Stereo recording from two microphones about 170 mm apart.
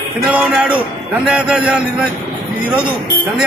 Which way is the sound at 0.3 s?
10° right (ahead or behind).